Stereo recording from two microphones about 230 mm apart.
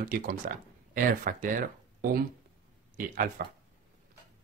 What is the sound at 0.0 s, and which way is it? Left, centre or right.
Speech, right.